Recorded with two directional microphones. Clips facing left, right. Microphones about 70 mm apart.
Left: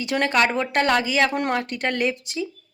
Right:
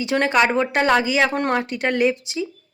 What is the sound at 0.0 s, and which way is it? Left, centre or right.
Speech, centre.